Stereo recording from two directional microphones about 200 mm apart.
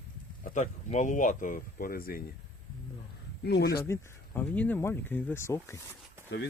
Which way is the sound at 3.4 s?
55° left (ahead or behind).